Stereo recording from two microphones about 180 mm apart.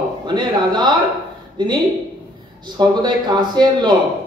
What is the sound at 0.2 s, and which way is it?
Speech, 25° right (ahead or behind).